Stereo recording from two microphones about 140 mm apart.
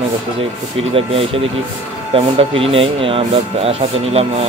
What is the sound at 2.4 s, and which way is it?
Speech, 40° right (ahead or behind).